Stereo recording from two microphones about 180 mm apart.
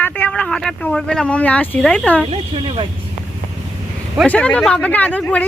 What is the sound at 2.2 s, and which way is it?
Speech, 30° right (ahead or behind).